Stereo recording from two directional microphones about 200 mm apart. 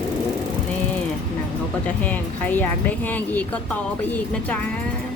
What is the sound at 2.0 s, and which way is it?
Speech, 10° left (ahead or behind).